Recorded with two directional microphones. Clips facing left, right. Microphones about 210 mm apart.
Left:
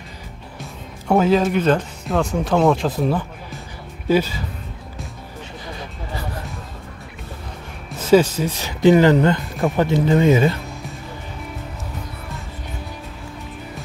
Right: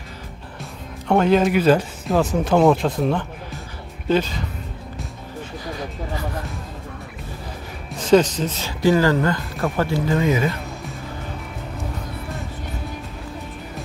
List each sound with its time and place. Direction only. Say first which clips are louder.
0.6 s speech: right 1 dB; 5° left (ahead or behind)
8.0 s speech: left 1 dB; 10° left (ahead or behind); by 10.5 s 30° left (ahead or behind)